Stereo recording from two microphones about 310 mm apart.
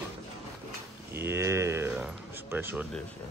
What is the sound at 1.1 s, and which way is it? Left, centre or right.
Speech, centre.